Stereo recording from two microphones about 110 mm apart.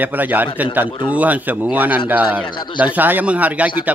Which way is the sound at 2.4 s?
45° left (ahead or behind).